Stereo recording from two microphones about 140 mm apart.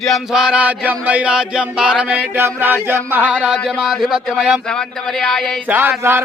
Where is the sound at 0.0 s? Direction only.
Centre (ahead or behind).